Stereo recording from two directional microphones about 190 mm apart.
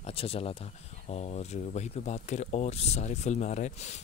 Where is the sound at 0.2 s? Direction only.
30° left (ahead or behind).